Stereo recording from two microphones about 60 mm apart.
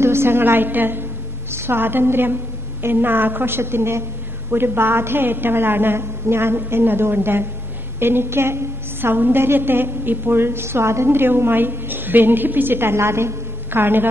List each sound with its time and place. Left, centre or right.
0.0 s a woman's voice: right